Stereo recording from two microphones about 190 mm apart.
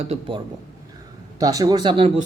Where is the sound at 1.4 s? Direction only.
20° right (ahead or behind).